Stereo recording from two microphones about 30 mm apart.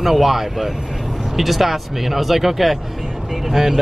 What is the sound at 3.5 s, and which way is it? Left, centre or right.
Speech, centre.